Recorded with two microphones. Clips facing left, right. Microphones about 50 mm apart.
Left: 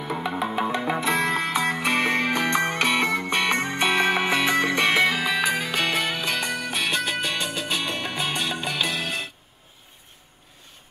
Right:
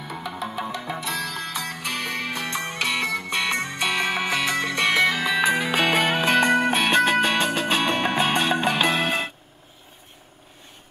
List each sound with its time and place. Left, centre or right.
0.2 s music: left
5.0 s music: centre
5.7 s music: centre
5.9 s music: right